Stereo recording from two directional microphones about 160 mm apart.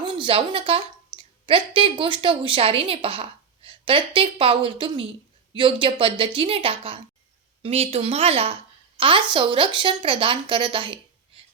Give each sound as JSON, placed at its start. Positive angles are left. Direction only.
{"t": 0.0, "sound": "a woman's voice", "side_deg": -35}